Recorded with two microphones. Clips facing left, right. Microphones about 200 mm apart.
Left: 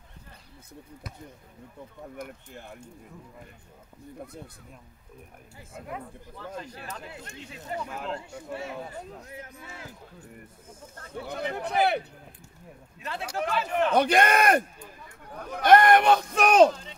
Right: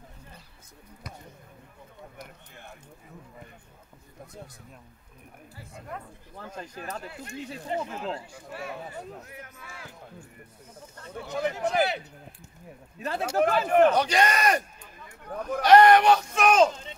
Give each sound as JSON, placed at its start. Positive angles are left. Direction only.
{"t": 6.3, "sound": "speech", "side_deg": -45}
{"t": 7.6, "sound": "speech", "side_deg": -25}
{"t": 8.3, "sound": "a man's voice", "side_deg": 25}
{"t": 11.0, "sound": "speech", "side_deg": 60}
{"t": 13.0, "sound": "speech", "side_deg": -40}
{"t": 13.9, "sound": "speech", "side_deg": 55}
{"t": 15.6, "sound": "speech", "side_deg": 50}